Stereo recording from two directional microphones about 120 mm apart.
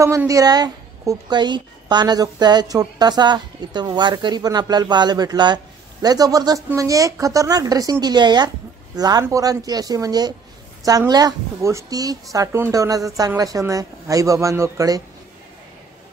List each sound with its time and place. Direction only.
0.3 s a woman's voice: 30° right (ahead or behind)